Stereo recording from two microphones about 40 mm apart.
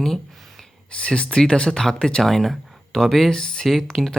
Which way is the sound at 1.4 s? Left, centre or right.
Centre.